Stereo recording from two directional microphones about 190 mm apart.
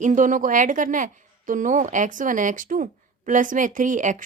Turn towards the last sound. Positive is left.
turn(degrees=-40)  # may be behind; listen again after turning